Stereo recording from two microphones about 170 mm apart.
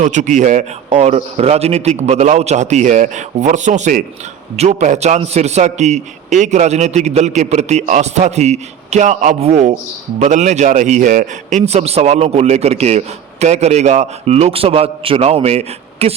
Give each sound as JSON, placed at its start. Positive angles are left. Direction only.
{"t": 0.0, "sound": "a man's voice", "side_deg": -45}